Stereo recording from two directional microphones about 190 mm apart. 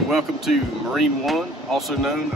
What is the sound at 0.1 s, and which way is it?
Speech, centre (ahead or behind).